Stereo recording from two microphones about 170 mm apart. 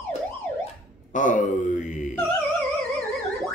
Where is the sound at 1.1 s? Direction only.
50° left (ahead or behind).